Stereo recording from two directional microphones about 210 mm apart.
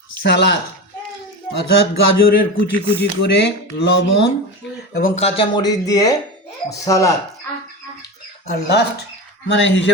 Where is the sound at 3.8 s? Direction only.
55° left (ahead or behind).